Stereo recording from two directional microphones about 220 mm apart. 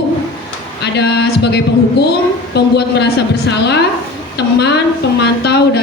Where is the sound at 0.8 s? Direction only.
50° left (ahead or behind).